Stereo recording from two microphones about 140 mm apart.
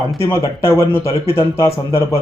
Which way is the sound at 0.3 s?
20° left (ahead or behind).